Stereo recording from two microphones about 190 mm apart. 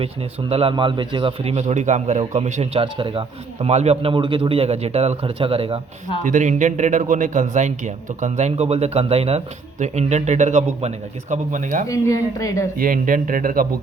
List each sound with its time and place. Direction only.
0.0 s a man's voice: 30° right (ahead or behind)
6.2 s a man's voice: 40° right (ahead or behind)
11.9 s a woman's voice: 15° left (ahead or behind)
12.7 s speech: 45° right (ahead or behind)